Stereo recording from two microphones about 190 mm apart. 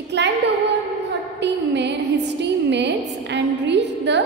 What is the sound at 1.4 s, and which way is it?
A woman's voice, 65° right (ahead or behind).